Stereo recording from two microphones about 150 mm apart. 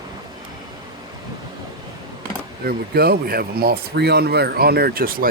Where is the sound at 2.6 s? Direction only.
90° right.